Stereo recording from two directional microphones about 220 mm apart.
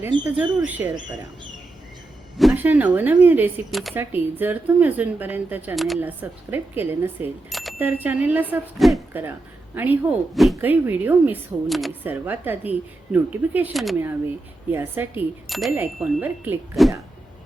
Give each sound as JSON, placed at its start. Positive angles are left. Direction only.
{"t": 0.1, "sound": "speech", "side_deg": -20}
{"t": 0.6, "sound": "speech", "side_deg": -5}
{"t": 2.4, "sound": "speech", "side_deg": -5}